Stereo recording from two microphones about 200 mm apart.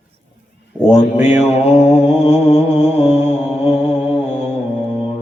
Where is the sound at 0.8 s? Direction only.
10° right (ahead or behind).